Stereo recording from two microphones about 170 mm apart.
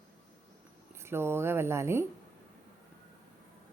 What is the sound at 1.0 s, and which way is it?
Speech, 15° right (ahead or behind).